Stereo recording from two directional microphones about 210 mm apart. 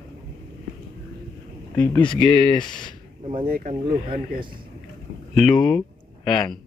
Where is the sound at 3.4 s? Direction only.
45° right (ahead or behind).